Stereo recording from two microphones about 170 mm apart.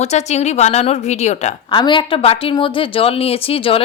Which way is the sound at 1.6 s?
30° left (ahead or behind).